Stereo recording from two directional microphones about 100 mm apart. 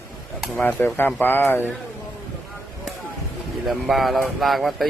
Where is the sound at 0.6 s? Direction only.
20° left (ahead or behind).